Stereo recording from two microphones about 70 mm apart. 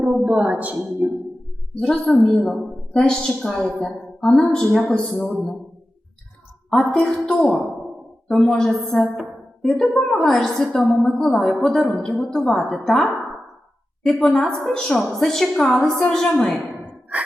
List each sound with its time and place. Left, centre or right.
0.0 s a woman's voice: centre
1.7 s a woman's voice: centre
7.0 s a woman's voice: centre